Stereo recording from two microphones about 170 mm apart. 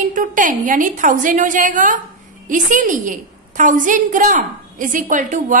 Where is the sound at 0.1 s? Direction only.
50° right (ahead or behind).